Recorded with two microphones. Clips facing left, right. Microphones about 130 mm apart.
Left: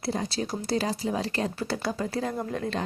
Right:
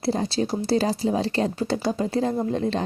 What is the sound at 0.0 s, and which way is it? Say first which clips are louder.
Speech: right 6 dB; 30° right (ahead or behind).